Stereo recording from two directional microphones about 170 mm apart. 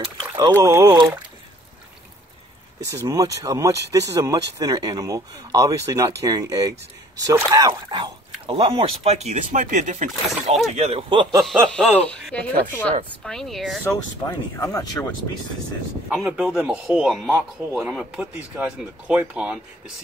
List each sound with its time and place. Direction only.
0.6 s speech: 20° right (ahead or behind)
2.8 s speech: 15° right (ahead or behind)
11.4 s a man's voice: centre (ahead or behind)
14.6 s speech: 20° left (ahead or behind)
16.1 s a man's voice: 5° right (ahead or behind)